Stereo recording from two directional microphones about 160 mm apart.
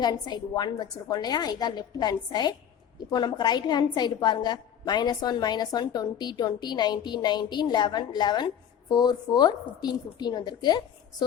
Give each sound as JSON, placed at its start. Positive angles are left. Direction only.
{"t": 0.0, "sound": "a woman's voice", "side_deg": 25}